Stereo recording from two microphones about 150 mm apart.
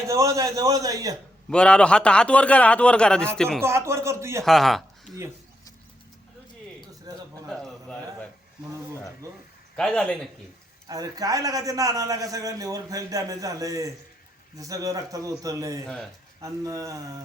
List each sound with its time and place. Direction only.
0.1 s a man's voice: 20° right (ahead or behind)
1.5 s a man's voice: 5° left (ahead or behind)
3.6 s a man's voice: 20° right (ahead or behind)
4.4 s speech: centre (ahead or behind)
7.1 s a sound: 25° right (ahead or behind)
7.4 s a sound: 5° left (ahead or behind)
9.7 s a man's voice: 5° left (ahead or behind)
10.8 s a man's voice: 25° right (ahead or behind)